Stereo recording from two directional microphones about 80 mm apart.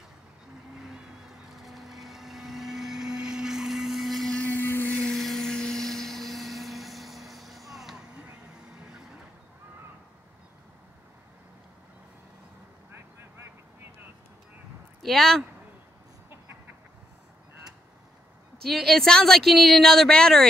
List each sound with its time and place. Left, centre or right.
0.7 s vehicle: centre
4.4 s blender: left
5.1 s a sound: centre
15.0 s speech: centre
18.6 s speech: centre